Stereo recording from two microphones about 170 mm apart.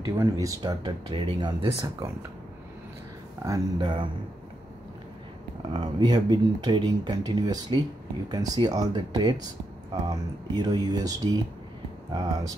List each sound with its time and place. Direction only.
0.0 s speech: 20° right (ahead or behind)
1.8 s speech: 20° right (ahead or behind)
3.4 s speech: 25° right (ahead or behind)
5.7 s speech: 25° right (ahead or behind)